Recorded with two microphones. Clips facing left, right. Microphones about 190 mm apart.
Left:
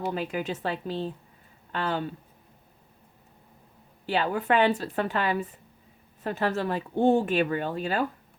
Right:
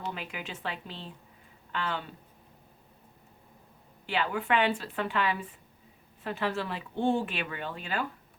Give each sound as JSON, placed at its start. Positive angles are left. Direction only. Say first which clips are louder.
{"t": 0.1, "sound": "speech", "louder": "left 9 dB", "side_deg": 40}
{"t": 4.0, "sound": "speech", "louder": "left 4 dB", "side_deg": 40}